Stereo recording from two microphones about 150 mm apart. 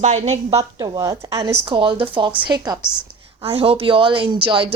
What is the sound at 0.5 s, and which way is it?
A woman's voice, 25° right (ahead or behind).